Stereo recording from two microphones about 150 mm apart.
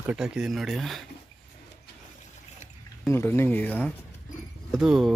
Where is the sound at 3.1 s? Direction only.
15° left (ahead or behind).